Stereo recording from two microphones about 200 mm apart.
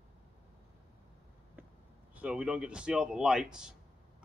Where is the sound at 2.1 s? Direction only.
5° right (ahead or behind).